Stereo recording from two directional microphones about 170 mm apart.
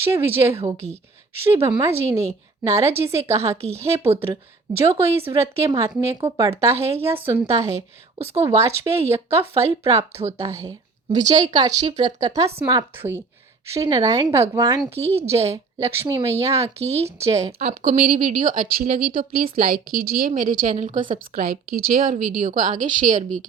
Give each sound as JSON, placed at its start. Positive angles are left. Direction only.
{"t": 0.0, "sound": "a woman's voice", "side_deg": -15}
{"t": 17.6, "sound": "a woman's voice", "side_deg": -40}